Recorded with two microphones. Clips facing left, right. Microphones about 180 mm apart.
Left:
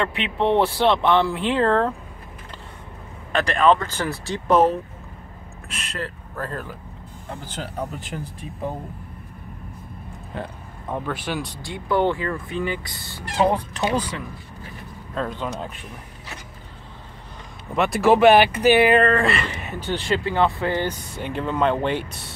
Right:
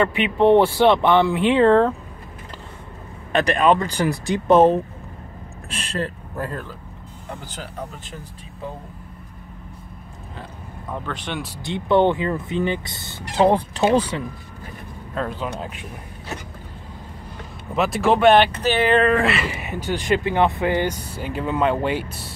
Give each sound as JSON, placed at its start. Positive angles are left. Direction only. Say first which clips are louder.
{"t": 0.0, "sound": "speech", "louder": "right 5 dB", "side_deg": -5}
{"t": 3.3, "sound": "speech", "louder": "right 1 dB", "side_deg": -20}
{"t": 6.0, "sound": "speech", "louder": "right 3 dB", "side_deg": -20}
{"t": 11.1, "sound": "speech", "louder": "left 1 dB", "side_deg": 5}
{"t": 11.6, "sound": "speech", "louder": "right 5 dB", "side_deg": -25}
{"t": 17.7, "sound": "speech", "louder": "left 2 dB", "side_deg": 0}
{"t": 19.0, "sound": "speech", "louder": "right 1 dB", "side_deg": -5}